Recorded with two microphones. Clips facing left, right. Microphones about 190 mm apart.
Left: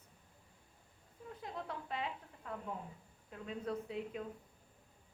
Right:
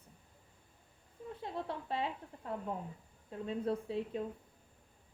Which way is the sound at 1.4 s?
30° right (ahead or behind).